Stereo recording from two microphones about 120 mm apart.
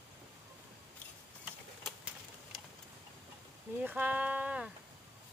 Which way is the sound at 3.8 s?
15° right (ahead or behind).